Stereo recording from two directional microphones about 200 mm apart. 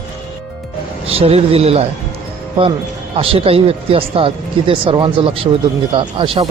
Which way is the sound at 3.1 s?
30° right (ahead or behind).